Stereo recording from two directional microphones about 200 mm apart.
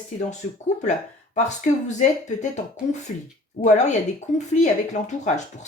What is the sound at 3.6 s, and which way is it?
Speech, 35° left (ahead or behind).